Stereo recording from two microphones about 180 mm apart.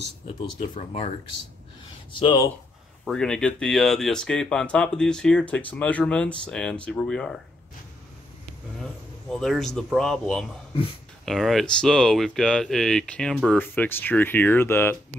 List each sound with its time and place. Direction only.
0.6 s speech: 35° left (ahead or behind)
2.1 s speech: 25° left (ahead or behind)
3.1 s speech: 5° left (ahead or behind)
9.3 s speech: centre (ahead or behind)